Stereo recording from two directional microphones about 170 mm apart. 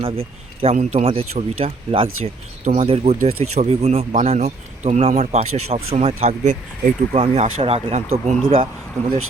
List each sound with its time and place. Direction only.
0.0 s speech: 35° right (ahead or behind)